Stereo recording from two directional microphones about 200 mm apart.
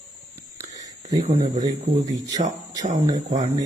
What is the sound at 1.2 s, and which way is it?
Speech, 35° right (ahead or behind).